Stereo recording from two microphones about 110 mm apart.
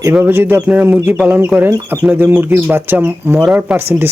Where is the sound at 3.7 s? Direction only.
20° right (ahead or behind).